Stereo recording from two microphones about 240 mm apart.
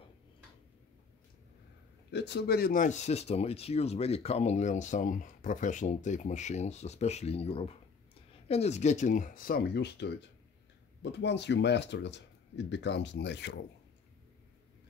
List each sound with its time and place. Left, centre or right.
2.0 s speech: left